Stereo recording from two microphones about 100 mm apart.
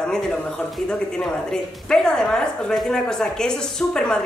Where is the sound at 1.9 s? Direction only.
5° left (ahead or behind).